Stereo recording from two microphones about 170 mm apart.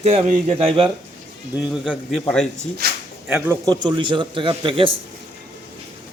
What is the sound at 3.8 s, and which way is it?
A man's voice, 25° right (ahead or behind).